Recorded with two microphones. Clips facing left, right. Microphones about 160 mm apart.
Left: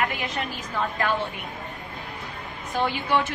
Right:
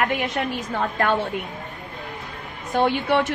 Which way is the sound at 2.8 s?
70° right (ahead or behind).